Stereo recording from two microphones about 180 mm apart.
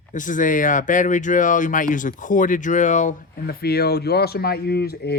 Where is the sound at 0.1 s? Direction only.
45° left (ahead or behind).